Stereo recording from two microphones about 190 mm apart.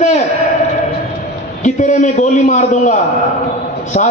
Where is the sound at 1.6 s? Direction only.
40° left (ahead or behind).